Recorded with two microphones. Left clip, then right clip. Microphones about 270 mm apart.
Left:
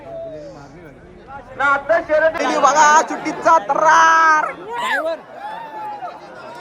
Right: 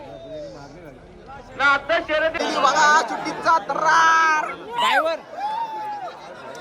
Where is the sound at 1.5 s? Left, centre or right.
Centre.